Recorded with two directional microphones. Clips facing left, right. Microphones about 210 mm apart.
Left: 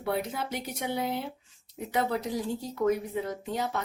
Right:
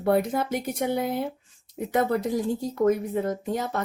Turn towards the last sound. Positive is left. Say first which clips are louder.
# right 4 dB
turn(degrees=-50)  # may be behind; listen again after turning